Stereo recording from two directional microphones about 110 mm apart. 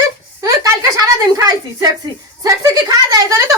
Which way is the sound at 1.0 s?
30° right (ahead or behind).